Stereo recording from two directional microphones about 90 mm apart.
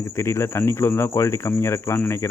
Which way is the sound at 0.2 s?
30° left (ahead or behind).